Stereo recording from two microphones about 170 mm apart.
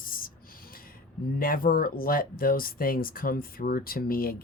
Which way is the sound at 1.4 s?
60° left (ahead or behind).